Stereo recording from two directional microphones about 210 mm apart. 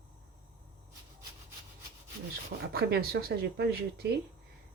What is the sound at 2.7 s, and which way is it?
Speech, 50° right (ahead or behind).